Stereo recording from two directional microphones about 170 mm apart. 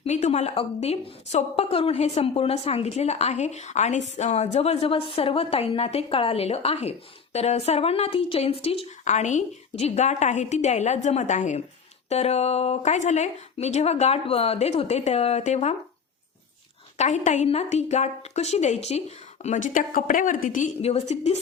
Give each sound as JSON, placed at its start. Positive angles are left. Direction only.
{"t": 0.0, "sound": "a woman's voice", "side_deg": 40}
{"t": 17.0, "sound": "a woman's voice", "side_deg": 45}
{"t": 20.8, "sound": "a woman's voice", "side_deg": 40}